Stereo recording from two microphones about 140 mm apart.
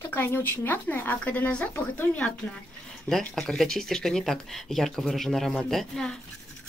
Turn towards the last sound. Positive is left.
turn(degrees=5)  # may be behind; listen again after turning